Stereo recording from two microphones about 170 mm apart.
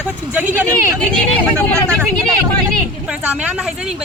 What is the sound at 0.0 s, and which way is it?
Speech, 10° right (ahead or behind).